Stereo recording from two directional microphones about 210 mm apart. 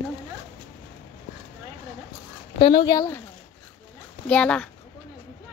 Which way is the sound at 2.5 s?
25° left (ahead or behind).